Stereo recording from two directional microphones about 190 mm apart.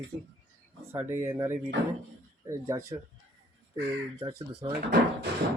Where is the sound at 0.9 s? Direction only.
10° right (ahead or behind).